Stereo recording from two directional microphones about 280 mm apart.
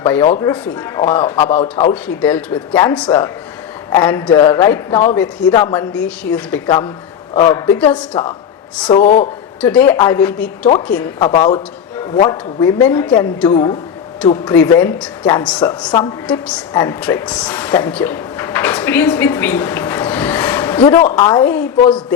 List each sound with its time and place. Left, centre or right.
0.0 s a man's voice: centre
1.4 s a man's voice: left
1.9 s a man's voice: centre; by 9.3 s left
9.6 s a man's voice: centre
11.2 s a man's voice: centre
16.2 s speech: centre